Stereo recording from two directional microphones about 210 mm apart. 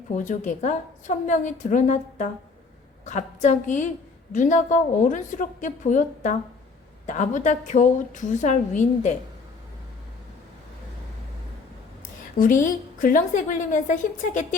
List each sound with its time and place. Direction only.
0.3 s a woman's voice: 35° left (ahead or behind)
12.4 s a woman's voice: 40° left (ahead or behind)